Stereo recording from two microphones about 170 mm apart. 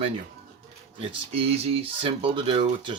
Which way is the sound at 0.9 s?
35° right (ahead or behind).